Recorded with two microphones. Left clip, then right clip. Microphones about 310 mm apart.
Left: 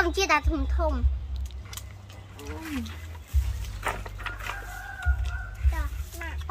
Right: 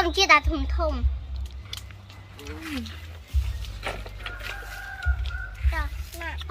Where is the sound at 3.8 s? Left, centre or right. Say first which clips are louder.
Left 2 dB; centre.